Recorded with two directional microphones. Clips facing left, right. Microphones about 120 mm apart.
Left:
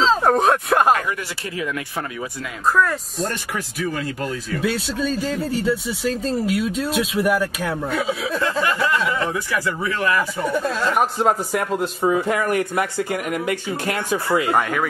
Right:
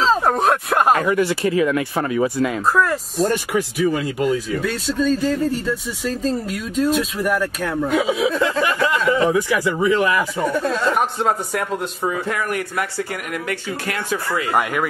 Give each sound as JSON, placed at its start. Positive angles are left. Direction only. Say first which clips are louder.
{"t": 0.0, "sound": "a sound", "louder": "left 1 dB", "side_deg": 0}
{"t": 1.0, "sound": "speech", "louder": "right 10 dB", "side_deg": -65}
{"t": 2.7, "sound": "speech", "louder": "right 1 dB", "side_deg": 0}
{"t": 3.5, "sound": "a man's voice", "louder": "right 6 dB", "side_deg": -15}
{"t": 4.6, "sound": "speech", "louder": "right 1 dB", "side_deg": 10}
{"t": 7.9, "sound": "a man's voice", "louder": "right 5 dB", "side_deg": -15}
{"t": 10.4, "sound": "speech", "louder": "right 2 dB", "side_deg": 0}
{"t": 12.5, "sound": "speech", "louder": "left 3 dB", "side_deg": 20}
{"t": 14.5, "sound": "speech", "louder": "even", "side_deg": -5}